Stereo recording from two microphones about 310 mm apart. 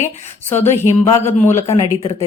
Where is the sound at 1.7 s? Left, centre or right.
Centre.